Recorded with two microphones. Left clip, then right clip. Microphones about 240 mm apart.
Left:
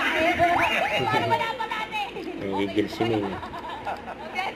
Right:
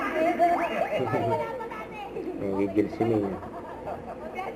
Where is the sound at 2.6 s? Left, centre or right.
Centre.